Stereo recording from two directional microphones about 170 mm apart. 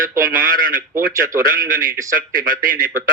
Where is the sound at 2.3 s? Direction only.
55° right (ahead or behind).